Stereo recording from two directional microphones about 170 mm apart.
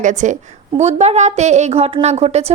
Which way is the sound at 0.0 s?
45° right (ahead or behind).